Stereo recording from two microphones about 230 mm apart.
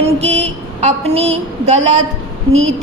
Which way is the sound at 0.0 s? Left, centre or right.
Right.